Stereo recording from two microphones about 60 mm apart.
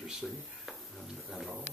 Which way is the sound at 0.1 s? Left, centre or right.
Centre.